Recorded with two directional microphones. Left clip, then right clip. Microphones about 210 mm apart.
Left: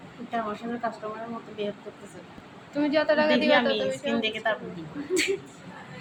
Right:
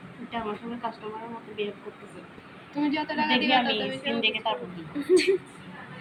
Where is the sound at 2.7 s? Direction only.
40° left (ahead or behind).